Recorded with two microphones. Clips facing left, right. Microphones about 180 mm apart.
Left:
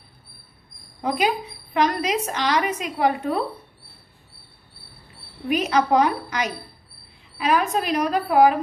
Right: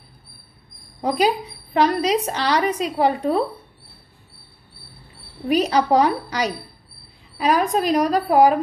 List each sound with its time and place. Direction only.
1.1 s a woman's voice: 35° right (ahead or behind)
5.5 s a woman's voice: 35° right (ahead or behind)